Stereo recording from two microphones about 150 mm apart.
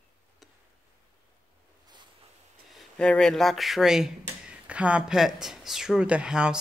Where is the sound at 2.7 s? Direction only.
5° left (ahead or behind).